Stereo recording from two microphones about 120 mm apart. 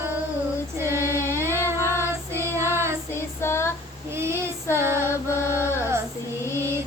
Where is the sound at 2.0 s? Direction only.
20° right (ahead or behind).